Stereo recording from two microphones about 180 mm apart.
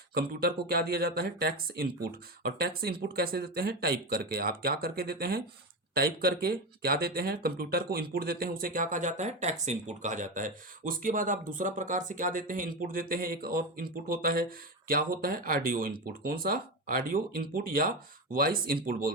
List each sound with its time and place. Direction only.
0.1 s speech: 60° right (ahead or behind)